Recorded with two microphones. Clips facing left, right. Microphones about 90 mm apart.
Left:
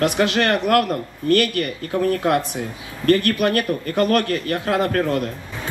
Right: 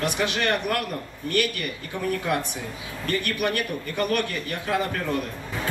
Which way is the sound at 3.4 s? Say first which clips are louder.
Left 6 dB; 45° left (ahead or behind).